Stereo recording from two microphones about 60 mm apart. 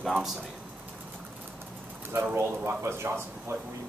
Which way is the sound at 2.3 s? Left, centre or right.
Right.